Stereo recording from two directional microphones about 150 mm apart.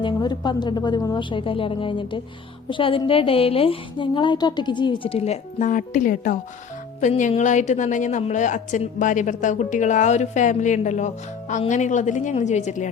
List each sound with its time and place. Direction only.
0.0 s a woman's voice: 30° left (ahead or behind); by 12.9 s 55° left (ahead or behind)